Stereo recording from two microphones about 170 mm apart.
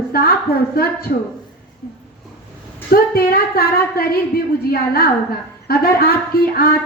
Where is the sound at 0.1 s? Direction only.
65° left (ahead or behind).